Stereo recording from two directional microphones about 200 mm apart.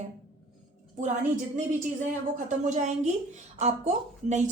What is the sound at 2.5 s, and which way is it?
A woman's voice, 35° right (ahead or behind).